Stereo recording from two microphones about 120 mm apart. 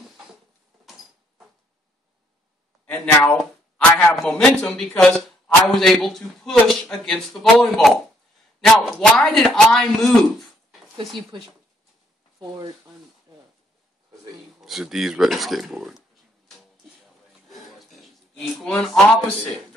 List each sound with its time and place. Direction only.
3.3 s a man's voice: 5° left (ahead or behind)
12.4 s speech: 30° right (ahead or behind)
14.6 s speech: centre (ahead or behind)
17.5 s a sound: centre (ahead or behind)
18.4 s speech: 5° left (ahead or behind)